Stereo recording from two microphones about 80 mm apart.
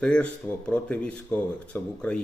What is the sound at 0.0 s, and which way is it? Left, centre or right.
Speech, centre.